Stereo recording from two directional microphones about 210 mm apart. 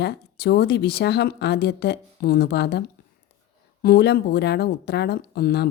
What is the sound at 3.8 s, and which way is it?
A woman's voice, 50° left (ahead or behind).